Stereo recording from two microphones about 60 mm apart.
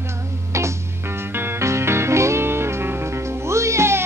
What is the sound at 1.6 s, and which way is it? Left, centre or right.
Music, right.